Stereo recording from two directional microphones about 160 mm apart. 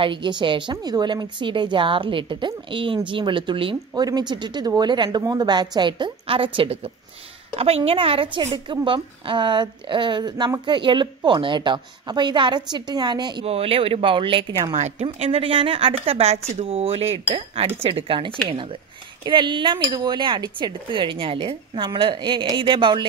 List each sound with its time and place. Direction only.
0.0 s a woman's voice: 30° right (ahead or behind)